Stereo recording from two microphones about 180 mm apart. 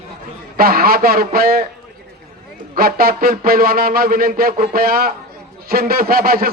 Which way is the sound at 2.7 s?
55° right (ahead or behind).